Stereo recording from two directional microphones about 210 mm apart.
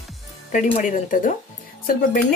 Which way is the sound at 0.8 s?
35° left (ahead or behind).